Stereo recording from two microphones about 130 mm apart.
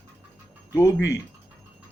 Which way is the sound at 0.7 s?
25° left (ahead or behind).